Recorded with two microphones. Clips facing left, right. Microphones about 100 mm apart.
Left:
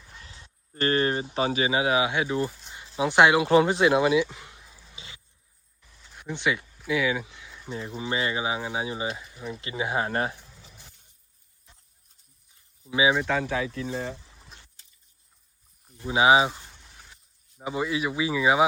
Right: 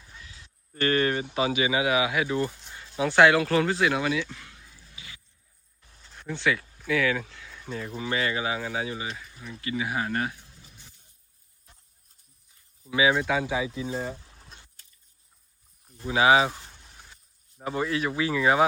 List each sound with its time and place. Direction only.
0.2 s speech: 35° left (ahead or behind)
2.6 s a sound: 20° left (ahead or behind)
6.8 s speech: 15° left (ahead or behind)
12.9 s speech: 20° left (ahead or behind)
13.1 s speech: 5° right (ahead or behind)
14.3 s a sound: centre (ahead or behind)
16.0 s speech: 20° left (ahead or behind)
16.7 s a sound: centre (ahead or behind)
17.6 s speech: 10° left (ahead or behind)